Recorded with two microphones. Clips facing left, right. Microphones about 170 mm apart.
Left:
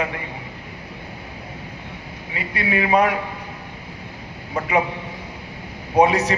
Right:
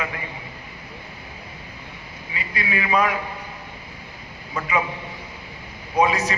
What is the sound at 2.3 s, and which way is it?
Speech, 50° left (ahead or behind).